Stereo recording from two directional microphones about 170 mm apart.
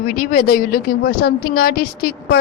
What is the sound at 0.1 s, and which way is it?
A woman's voice, 55° left (ahead or behind).